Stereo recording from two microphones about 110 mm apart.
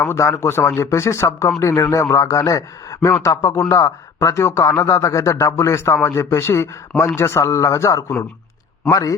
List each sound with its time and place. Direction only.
0.0 s speech: 25° left (ahead or behind)